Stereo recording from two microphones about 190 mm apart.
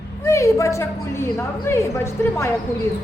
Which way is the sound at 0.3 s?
15° left (ahead or behind).